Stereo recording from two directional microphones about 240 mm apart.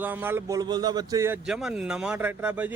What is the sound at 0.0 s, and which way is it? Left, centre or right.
Speech, centre.